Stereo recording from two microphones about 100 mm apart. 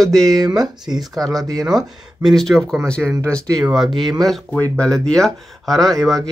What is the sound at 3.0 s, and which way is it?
Speech, 10° right (ahead or behind).